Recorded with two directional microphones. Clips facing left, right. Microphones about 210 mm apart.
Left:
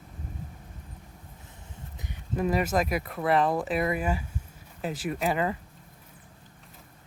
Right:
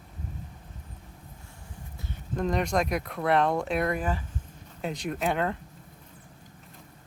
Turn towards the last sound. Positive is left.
turn(degrees=5)  # may be behind; listen again after turning